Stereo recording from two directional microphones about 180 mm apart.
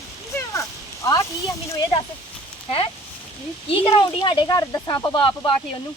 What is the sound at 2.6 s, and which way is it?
Speech, 30° left (ahead or behind).